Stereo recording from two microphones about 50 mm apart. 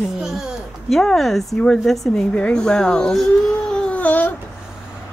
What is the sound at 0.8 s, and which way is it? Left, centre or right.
Speech, centre.